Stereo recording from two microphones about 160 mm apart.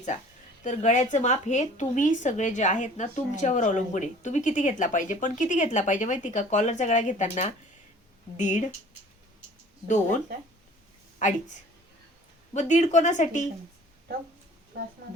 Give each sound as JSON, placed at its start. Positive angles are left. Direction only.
{"t": 0.6, "sound": "speech", "side_deg": 50}
{"t": 9.8, "sound": "speech", "side_deg": 50}
{"t": 11.2, "sound": "speech", "side_deg": 50}
{"t": 12.5, "sound": "speech", "side_deg": 50}